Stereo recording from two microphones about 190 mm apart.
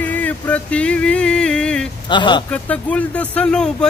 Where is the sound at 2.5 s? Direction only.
5° left (ahead or behind).